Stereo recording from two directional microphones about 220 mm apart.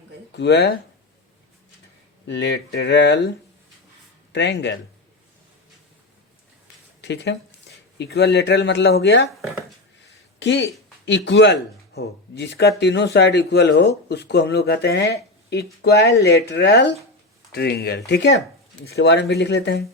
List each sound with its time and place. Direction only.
0.3 s speech: 50° left (ahead or behind)
2.2 s speech: 50° left (ahead or behind)
4.3 s speech: 55° left (ahead or behind)
7.0 s speech: 55° left (ahead or behind)
9.4 s speech: centre (ahead or behind)
10.4 s speech: 55° left (ahead or behind)